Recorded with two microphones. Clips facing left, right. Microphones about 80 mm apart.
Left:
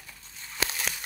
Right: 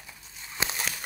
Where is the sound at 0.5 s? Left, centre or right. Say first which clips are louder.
Even; right.